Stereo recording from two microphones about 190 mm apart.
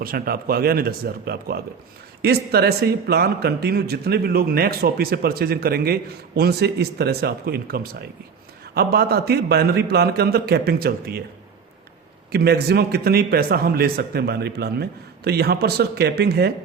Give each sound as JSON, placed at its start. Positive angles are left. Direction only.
{"t": 0.0, "sound": "a man's voice", "side_deg": -50}
{"t": 12.3, "sound": "a man's voice", "side_deg": -55}